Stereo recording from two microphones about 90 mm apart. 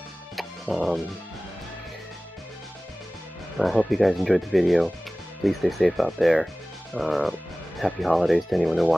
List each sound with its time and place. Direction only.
0.4 s music: centre (ahead or behind)
3.5 s speech: centre (ahead or behind)